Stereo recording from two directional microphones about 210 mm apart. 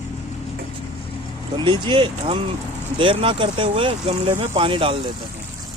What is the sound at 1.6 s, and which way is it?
Speech, 20° right (ahead or behind).